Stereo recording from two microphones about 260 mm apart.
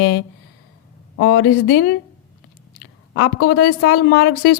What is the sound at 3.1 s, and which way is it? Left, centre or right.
A woman's voice, left.